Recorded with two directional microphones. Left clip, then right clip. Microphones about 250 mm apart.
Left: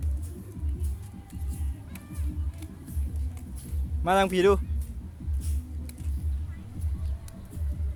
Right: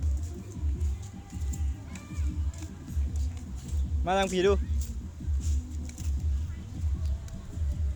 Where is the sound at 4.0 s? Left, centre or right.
Centre.